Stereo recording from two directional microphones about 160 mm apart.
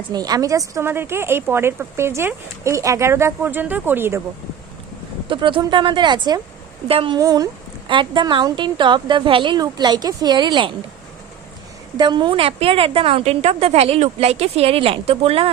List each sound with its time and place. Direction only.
0.1 s speech: 25° right (ahead or behind)
5.3 s a woman's voice: 30° right (ahead or behind)
7.2 s a woman's voice: 25° right (ahead or behind)
11.9 s a woman's voice: 30° right (ahead or behind)